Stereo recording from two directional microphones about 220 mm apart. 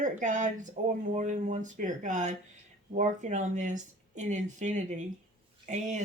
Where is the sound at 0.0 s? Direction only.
35° right (ahead or behind).